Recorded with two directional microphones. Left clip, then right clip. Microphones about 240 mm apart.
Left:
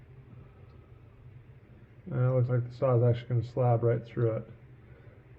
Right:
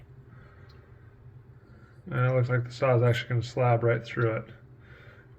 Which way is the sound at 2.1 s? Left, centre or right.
Centre.